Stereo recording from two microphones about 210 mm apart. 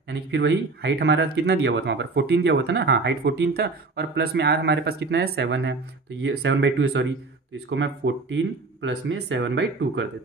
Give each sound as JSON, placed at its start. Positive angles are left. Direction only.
{"t": 0.1, "sound": "speech", "side_deg": -55}